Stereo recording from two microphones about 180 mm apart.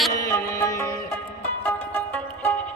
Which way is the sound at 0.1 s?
15° left (ahead or behind).